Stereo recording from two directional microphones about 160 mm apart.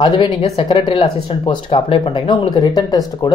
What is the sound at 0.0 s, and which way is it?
Speech, 30° left (ahead or behind).